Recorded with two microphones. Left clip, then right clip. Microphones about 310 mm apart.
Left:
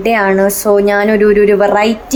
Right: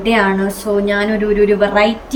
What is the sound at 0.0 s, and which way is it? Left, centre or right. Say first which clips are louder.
A woman's voice: left 4 dB; centre.